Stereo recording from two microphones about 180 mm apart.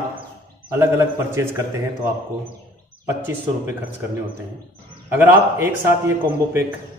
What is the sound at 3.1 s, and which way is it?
Speech, 15° right (ahead or behind).